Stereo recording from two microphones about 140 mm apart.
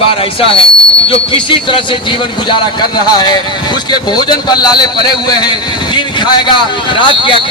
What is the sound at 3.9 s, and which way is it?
A man's voice, 30° left (ahead or behind).